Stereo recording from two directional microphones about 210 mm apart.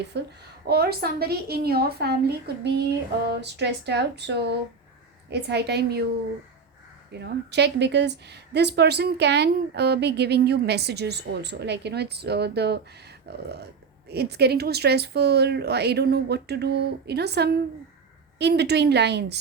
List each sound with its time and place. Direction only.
0.1 s a woman's voice: 55° right (ahead or behind)
7.1 s a woman's voice: 55° right (ahead or behind)